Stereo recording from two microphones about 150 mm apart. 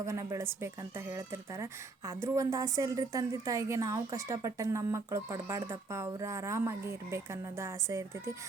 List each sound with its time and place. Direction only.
0.0 s speech: 20° right (ahead or behind)